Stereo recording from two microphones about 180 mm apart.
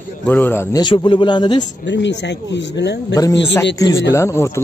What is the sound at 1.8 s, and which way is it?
Speech, 85° left.